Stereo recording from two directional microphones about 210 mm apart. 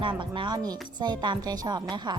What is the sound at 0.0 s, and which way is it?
A woman's voice, 25° right (ahead or behind).